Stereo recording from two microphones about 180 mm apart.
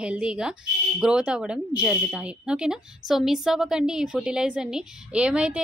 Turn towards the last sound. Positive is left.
turn(degrees=-5)  # may be behind; listen again after turning